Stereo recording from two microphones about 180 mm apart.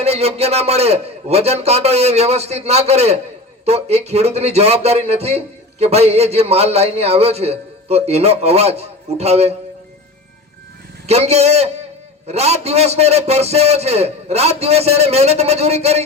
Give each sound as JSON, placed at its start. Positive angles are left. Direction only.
{"t": 0.0, "sound": "speech", "side_deg": -35}
{"t": 11.0, "sound": "speech", "side_deg": -35}